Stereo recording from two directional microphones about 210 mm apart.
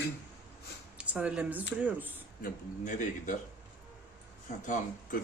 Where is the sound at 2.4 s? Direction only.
35° left (ahead or behind).